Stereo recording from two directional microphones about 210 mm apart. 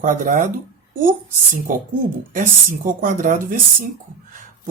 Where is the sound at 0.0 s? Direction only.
40° right (ahead or behind).